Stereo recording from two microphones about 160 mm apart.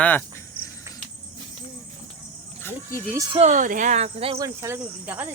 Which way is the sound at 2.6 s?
15° left (ahead or behind).